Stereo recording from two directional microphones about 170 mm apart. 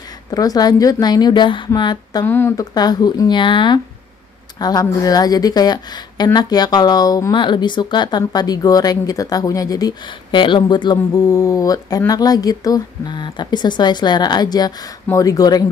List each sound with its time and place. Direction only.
0.3 s a woman's voice: 20° left (ahead or behind)
2.2 s a woman's voice: 15° left (ahead or behind)